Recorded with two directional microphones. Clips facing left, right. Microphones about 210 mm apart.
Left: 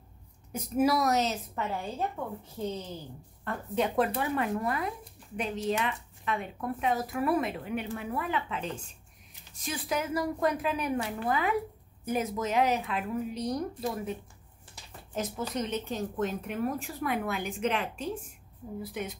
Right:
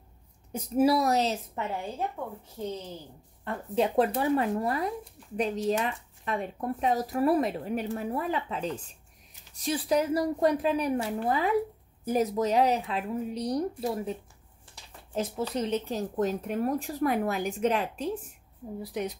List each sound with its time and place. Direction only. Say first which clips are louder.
0.5 s speech: right 3 dB; 30° right (ahead or behind)
2.2 s a woman's voice: even; 15° right (ahead or behind)
3.4 s speech: right 2 dB; 30° right (ahead or behind)
15.1 s speech: right 3 dB; 30° right (ahead or behind)